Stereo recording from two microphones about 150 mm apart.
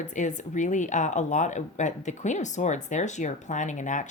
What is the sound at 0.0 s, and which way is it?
Speech, 55° left (ahead or behind).